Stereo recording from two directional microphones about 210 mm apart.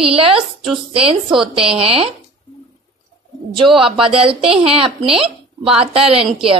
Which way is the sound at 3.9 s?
25° right (ahead or behind).